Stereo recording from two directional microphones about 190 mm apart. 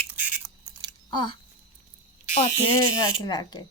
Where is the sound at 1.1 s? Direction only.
25° left (ahead or behind).